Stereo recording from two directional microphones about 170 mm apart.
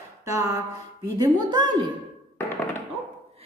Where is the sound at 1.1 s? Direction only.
25° right (ahead or behind).